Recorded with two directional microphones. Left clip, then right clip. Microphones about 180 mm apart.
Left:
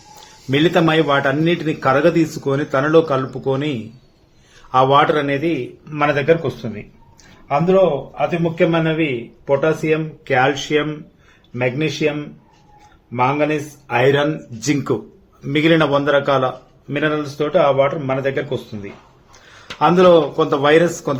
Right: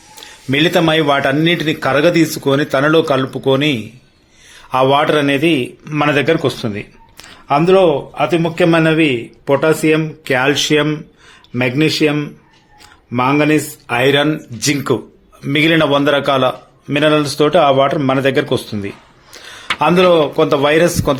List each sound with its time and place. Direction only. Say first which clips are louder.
0.5 s a man's voice: right 2 dB; 20° right (ahead or behind); by 14.0 s 40° right (ahead or behind)
14.0 s a man's voice: right 3 dB; 20° right (ahead or behind); by 18.9 s 40° right (ahead or behind)
19.8 s speech: right 1 dB; 15° right (ahead or behind)